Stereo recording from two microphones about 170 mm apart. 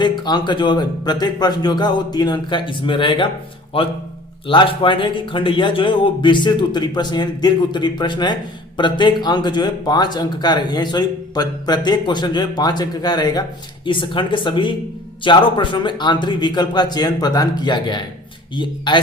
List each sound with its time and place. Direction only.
0.0 s speech: 25° left (ahead or behind)
4.4 s speech: 30° left (ahead or behind)